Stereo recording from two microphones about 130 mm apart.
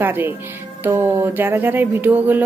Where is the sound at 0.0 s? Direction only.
15° right (ahead or behind).